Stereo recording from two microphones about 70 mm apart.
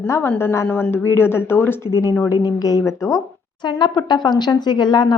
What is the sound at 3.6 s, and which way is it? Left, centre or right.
Speech, left.